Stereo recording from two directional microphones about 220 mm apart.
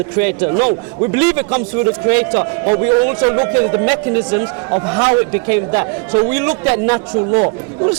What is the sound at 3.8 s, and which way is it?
A man's voice, 15° right (ahead or behind).